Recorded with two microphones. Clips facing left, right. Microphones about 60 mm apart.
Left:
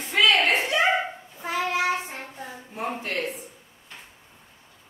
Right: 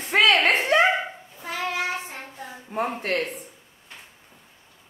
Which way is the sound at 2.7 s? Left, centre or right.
Right.